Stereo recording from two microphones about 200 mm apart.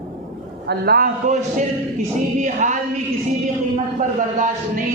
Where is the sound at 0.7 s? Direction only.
50° right (ahead or behind).